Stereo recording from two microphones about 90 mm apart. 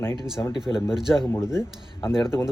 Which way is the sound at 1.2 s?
25° left (ahead or behind).